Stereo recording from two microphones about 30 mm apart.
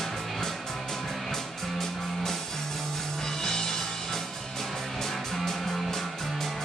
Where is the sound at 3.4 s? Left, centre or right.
Centre.